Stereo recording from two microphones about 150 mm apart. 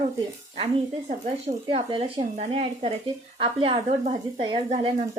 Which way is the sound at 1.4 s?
40° right (ahead or behind).